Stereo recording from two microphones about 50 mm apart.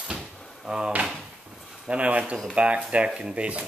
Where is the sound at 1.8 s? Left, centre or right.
Right.